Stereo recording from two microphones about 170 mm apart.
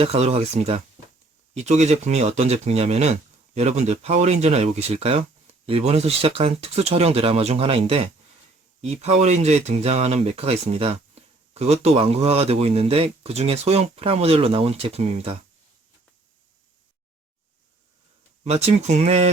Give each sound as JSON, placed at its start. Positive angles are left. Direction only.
{"t": 0.0, "sound": "speech", "side_deg": -40}
{"t": 18.4, "sound": "speech", "side_deg": -40}